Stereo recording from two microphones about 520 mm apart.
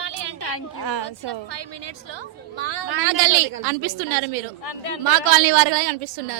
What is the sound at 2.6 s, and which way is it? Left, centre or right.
Speech, right.